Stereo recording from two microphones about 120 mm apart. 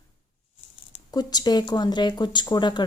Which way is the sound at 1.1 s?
35° left (ahead or behind).